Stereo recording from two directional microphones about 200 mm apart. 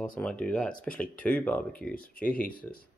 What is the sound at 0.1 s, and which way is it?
Speech, 5° left (ahead or behind).